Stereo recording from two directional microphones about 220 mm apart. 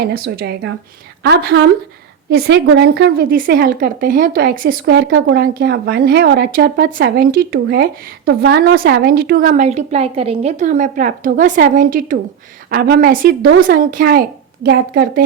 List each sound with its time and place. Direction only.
0.0 s a woman's voice: 45° right (ahead or behind)